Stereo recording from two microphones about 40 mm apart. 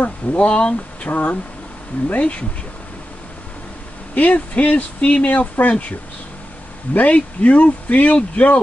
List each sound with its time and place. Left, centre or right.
0.0 s speech: left
0.5 s speech: left
1.1 s speech: left
4.1 s speech: left